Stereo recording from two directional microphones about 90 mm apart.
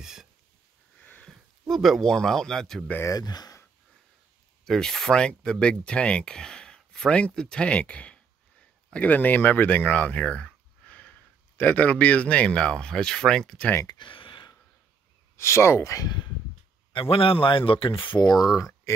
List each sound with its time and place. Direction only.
0.0 s a sound: 5° right (ahead or behind)
0.9 s sniff: 15° left (ahead or behind)
1.7 s speech: centre (ahead or behind)
3.0 s speech: 45° left (ahead or behind)
4.6 s speech: 5° left (ahead or behind)
13.8 s a sound: 60° left (ahead or behind)
15.3 s speech: 30° left (ahead or behind)
16.9 s speech: 90° left; by 18.4 s 50° left (ahead or behind)